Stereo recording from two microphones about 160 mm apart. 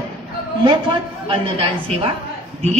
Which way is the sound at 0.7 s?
30° right (ahead or behind).